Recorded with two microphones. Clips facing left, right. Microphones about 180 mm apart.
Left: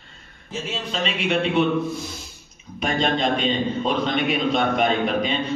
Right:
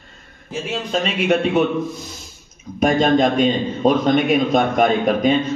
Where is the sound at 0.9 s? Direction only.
45° right (ahead or behind).